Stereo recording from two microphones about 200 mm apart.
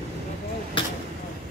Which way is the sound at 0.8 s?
25° left (ahead or behind).